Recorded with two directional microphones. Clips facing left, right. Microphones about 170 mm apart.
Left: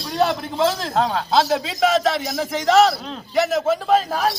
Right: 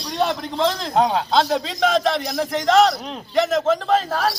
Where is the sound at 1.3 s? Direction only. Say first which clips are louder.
Left 1 dB; 5° left (ahead or behind).